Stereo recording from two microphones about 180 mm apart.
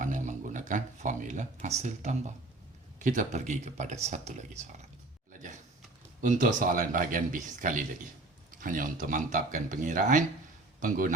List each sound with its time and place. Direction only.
0.0 s speech: 45° right (ahead or behind)
5.3 s a sound: 45° right (ahead or behind)
6.2 s a man's voice: 45° right (ahead or behind)